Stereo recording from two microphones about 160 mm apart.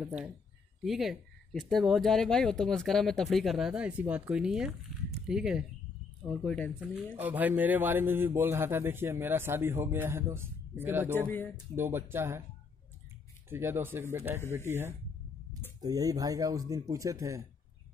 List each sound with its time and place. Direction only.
0.8 s a man's voice: centre (ahead or behind)
11.1 s speech: 10° left (ahead or behind)
11.7 s a man's voice: 15° right (ahead or behind)
13.5 s a man's voice: 15° right (ahead or behind)